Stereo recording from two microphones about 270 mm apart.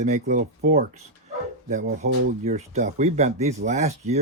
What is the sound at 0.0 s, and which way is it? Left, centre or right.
Speech, right.